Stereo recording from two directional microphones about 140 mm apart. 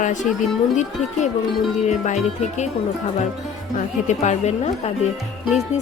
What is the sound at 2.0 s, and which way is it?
Speech, 55° left (ahead or behind).